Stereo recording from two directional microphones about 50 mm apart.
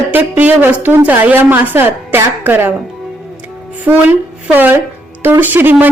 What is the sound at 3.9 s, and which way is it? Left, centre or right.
A woman's voice, right.